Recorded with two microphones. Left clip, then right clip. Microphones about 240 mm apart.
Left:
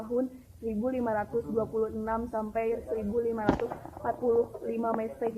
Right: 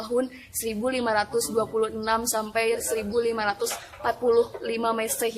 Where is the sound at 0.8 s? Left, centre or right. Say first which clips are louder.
Right 6 dB; right.